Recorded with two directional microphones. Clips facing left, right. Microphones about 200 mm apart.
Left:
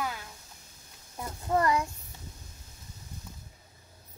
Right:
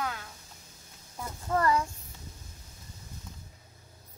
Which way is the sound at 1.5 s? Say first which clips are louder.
Left 1 dB; 15° left (ahead or behind).